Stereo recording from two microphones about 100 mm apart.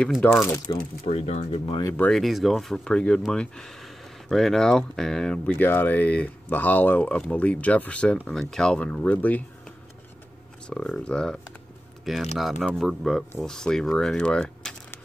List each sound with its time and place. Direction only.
0.2 s speech: 15° left (ahead or behind)
0.7 s speech: 50° left (ahead or behind)
1.0 s speech: 90° left
2.0 s speech: 10° left (ahead or behind)